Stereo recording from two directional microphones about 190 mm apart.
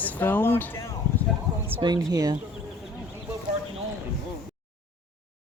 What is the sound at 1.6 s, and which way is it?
Speech, 25° right (ahead or behind).